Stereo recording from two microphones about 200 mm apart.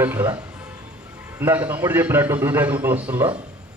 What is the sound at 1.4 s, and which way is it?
A man's voice, 10° right (ahead or behind).